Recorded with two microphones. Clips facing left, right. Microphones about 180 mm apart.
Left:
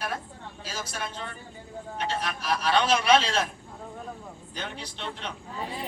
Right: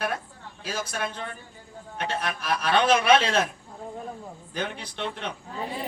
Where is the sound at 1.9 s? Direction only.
55° right (ahead or behind).